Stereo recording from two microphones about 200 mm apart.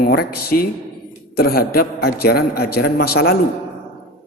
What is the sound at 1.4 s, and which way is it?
A man's voice, 50° left (ahead or behind).